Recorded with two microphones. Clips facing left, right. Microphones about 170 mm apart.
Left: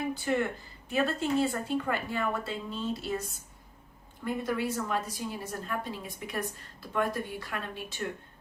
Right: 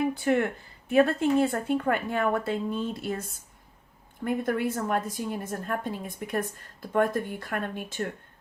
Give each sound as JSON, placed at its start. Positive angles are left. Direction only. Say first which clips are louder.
{"t": 0.1, "sound": "a woman's voice", "louder": "right 4 dB", "side_deg": -60}